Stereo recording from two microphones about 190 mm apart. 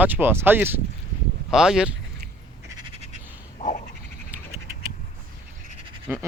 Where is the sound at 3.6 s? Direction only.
40° left (ahead or behind).